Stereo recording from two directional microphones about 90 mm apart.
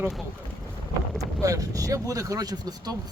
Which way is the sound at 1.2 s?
40° right (ahead or behind).